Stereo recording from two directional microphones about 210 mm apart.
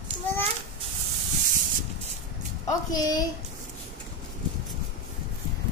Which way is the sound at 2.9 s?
20° left (ahead or behind).